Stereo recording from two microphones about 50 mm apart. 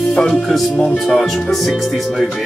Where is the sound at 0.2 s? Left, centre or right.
Centre.